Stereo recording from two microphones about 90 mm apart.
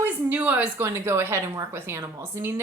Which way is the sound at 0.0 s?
20° right (ahead or behind).